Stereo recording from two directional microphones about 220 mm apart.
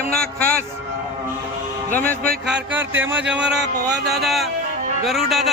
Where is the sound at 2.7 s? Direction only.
10° right (ahead or behind).